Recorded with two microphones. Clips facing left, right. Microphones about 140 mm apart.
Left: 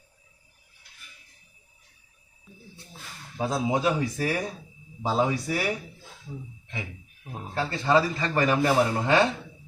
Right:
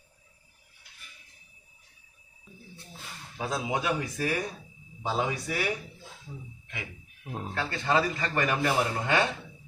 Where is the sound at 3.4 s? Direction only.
30° left (ahead or behind).